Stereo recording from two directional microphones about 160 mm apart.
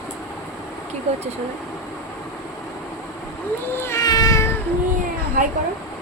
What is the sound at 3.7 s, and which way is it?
Cat, 15° left (ahead or behind).